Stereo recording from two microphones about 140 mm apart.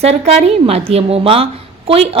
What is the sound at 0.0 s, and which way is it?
A woman's voice, 50° right (ahead or behind).